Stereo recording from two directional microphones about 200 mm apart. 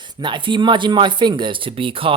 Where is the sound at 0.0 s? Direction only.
25° right (ahead or behind).